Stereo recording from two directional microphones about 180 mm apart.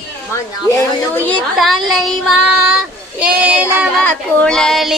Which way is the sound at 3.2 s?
10° right (ahead or behind).